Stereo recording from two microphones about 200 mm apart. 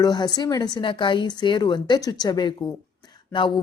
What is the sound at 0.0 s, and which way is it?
Speech, 20° left (ahead or behind).